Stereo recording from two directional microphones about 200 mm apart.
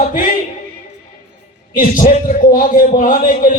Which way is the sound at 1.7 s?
45° left (ahead or behind).